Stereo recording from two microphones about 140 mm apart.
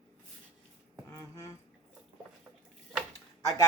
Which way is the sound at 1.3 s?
20° left (ahead or behind).